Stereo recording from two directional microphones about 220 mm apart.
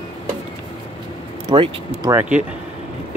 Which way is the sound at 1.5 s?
20° right (ahead or behind).